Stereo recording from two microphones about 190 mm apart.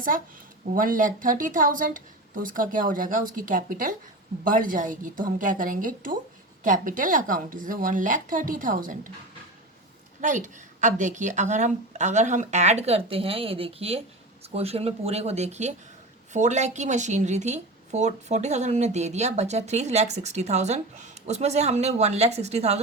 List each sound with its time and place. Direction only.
0.7 s speech: 45° right (ahead or behind)
10.2 s speech: 40° right (ahead or behind)